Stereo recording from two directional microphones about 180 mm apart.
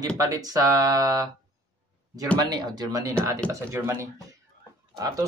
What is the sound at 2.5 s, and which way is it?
Speech, 20° right (ahead or behind).